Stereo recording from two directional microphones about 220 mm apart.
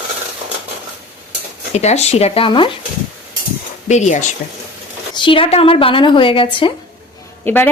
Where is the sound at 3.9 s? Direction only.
30° left (ahead or behind).